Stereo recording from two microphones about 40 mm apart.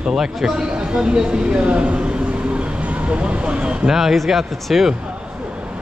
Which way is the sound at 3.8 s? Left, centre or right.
Centre.